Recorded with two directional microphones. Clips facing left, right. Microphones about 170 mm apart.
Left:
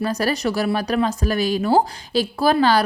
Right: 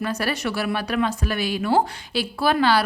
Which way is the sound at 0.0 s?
40° left (ahead or behind).